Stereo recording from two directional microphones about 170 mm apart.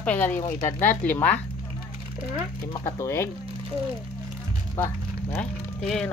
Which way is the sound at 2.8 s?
15° left (ahead or behind).